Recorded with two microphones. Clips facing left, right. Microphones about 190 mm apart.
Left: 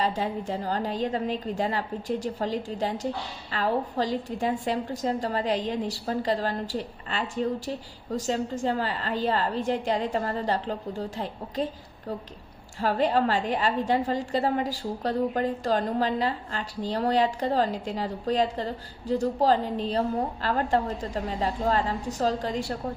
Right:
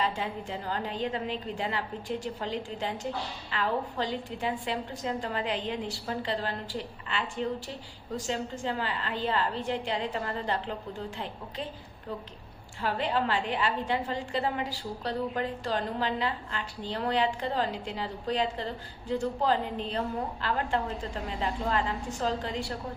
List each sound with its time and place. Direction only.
0.0 s a woman's voice: 40° left (ahead or behind)